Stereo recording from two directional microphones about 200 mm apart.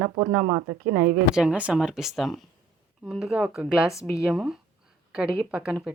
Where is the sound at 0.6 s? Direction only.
45° right (ahead or behind).